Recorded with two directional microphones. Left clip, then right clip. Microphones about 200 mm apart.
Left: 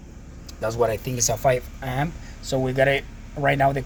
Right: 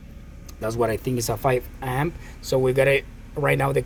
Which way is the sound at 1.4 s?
45° right (ahead or behind).